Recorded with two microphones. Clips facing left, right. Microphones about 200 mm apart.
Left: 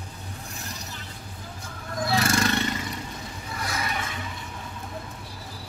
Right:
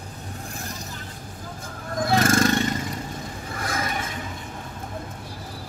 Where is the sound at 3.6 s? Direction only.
50° right (ahead or behind).